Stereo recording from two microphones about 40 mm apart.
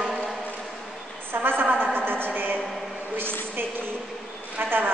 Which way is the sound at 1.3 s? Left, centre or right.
Right.